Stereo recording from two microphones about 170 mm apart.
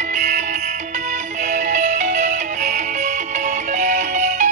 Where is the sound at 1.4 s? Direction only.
45° right (ahead or behind).